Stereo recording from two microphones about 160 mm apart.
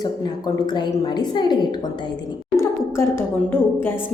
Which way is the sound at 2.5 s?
15° left (ahead or behind).